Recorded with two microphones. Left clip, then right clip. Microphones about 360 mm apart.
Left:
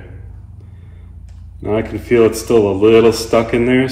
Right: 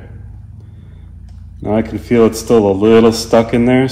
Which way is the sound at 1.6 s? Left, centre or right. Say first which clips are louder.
Right 2 dB; right.